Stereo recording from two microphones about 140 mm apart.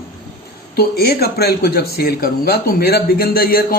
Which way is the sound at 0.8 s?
90° left.